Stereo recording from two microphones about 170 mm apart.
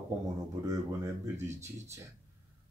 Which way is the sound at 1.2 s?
15° right (ahead or behind).